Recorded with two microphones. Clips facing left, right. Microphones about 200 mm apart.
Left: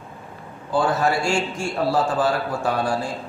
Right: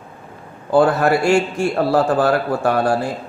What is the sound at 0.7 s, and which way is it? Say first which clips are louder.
A man's voice: right 6 dB; 60° right (ahead or behind).